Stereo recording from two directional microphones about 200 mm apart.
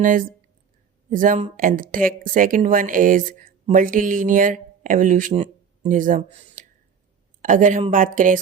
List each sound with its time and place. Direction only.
0.0 s speech: 40° right (ahead or behind)